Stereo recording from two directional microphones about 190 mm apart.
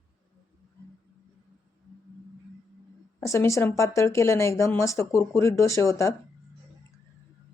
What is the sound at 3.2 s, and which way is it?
Speech, 15° left (ahead or behind).